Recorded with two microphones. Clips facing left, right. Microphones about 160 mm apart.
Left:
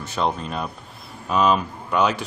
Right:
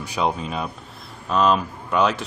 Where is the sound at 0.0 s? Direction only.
10° right (ahead or behind).